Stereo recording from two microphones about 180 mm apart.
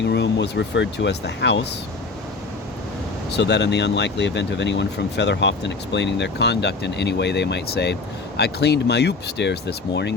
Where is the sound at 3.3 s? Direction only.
70° left (ahead or behind).